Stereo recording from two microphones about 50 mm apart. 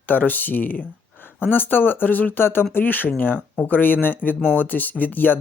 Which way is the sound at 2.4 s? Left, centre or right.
Left.